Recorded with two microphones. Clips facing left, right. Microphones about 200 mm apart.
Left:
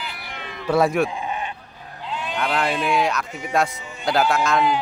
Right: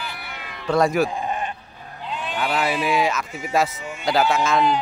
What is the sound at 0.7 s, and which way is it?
Speech, 5° left (ahead or behind).